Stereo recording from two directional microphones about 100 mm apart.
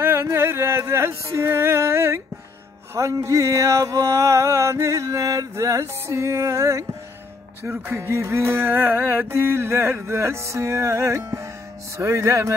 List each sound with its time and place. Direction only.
0.0 s music: 25° right (ahead or behind)
7.6 s music: 20° right (ahead or behind)